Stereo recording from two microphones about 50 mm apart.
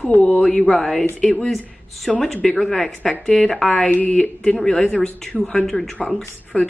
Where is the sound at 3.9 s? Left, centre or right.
Left.